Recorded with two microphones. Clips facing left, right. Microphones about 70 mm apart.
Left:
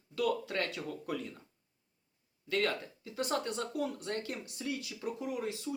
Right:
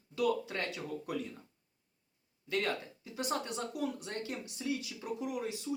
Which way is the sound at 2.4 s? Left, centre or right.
Right.